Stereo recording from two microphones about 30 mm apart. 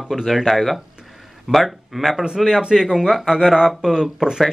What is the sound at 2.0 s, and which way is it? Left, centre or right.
Speech, centre.